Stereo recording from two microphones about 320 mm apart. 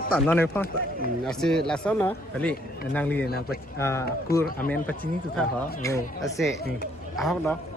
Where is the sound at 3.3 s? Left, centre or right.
Left.